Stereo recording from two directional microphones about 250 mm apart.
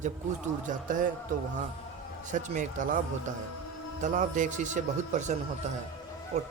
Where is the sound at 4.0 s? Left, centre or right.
Right.